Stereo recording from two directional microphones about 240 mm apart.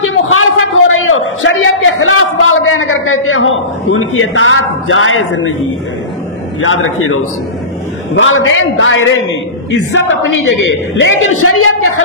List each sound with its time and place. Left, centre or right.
0.1 s a sound: left
6.6 s a man's voice: left
11.0 s a man's voice: left